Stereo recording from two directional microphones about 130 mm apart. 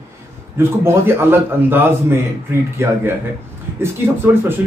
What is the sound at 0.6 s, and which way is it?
A man's voice, 15° right (ahead or behind).